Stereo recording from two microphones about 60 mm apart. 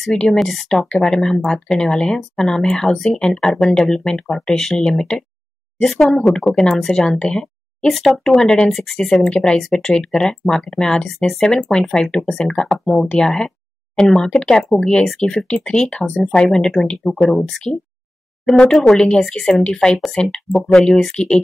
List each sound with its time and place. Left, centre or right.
0.0 s speech: centre
7.9 s speech: centre
16.3 s speech: centre
18.4 s speech: centre